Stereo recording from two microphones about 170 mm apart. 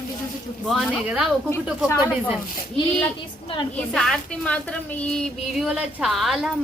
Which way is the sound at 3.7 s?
5° left (ahead or behind).